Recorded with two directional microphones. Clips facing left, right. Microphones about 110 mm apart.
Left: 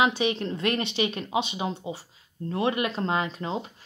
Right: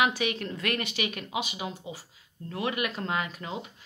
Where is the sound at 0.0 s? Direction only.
25° left (ahead or behind).